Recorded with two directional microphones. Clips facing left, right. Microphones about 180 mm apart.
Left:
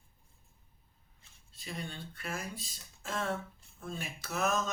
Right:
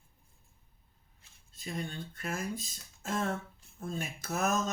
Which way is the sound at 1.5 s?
45° right (ahead or behind).